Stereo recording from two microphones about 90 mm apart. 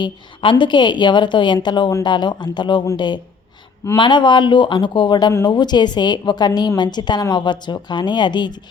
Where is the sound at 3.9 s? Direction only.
60° left (ahead or behind).